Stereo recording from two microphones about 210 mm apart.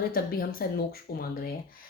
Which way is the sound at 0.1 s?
45° left (ahead or behind).